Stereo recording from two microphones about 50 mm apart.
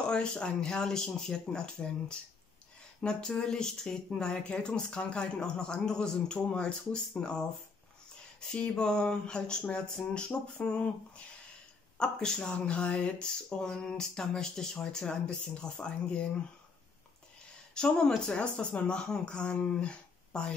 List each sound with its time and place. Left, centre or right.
0.1 s speech: centre
8.5 s speech: centre
17.7 s speech: centre